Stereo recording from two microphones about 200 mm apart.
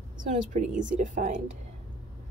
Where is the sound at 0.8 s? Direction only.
40° right (ahead or behind).